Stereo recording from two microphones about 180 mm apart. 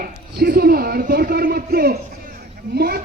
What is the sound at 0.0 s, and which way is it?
A man's voice, 60° right (ahead or behind).